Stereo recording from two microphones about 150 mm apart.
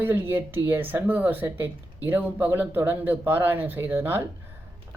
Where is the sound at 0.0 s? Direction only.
15° right (ahead or behind).